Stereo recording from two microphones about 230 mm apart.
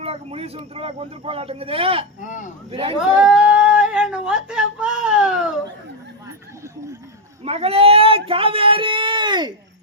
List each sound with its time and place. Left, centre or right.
0.0 s speech: right
3.2 s a sound: centre
7.4 s speech: right